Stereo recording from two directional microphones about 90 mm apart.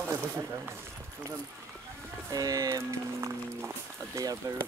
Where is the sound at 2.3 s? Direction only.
40° right (ahead or behind).